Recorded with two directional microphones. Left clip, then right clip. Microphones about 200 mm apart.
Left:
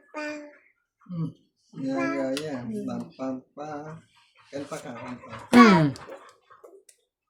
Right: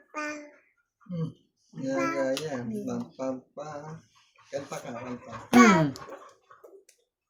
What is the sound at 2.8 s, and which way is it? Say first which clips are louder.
Speech: even; 35° right (ahead or behind).